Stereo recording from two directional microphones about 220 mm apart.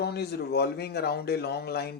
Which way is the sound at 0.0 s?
45° left (ahead or behind).